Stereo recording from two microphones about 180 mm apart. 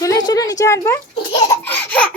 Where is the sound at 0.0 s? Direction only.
20° left (ahead or behind).